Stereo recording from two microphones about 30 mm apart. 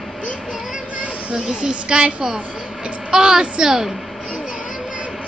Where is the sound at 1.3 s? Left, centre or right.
Right.